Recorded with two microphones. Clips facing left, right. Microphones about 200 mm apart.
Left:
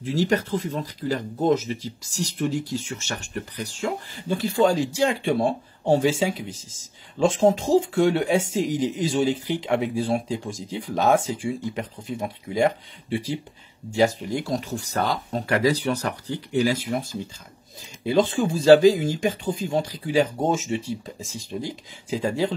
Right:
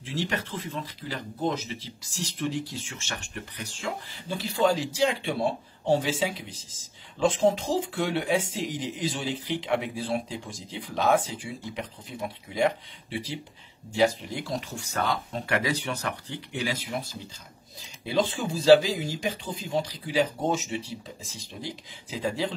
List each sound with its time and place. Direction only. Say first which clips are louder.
0.0 s speech: left 8 dB; 40° left (ahead or behind)
13.9 s speech: left 3 dB; 45° left (ahead or behind)